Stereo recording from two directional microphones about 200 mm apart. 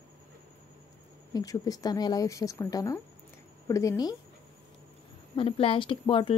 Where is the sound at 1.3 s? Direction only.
20° left (ahead or behind).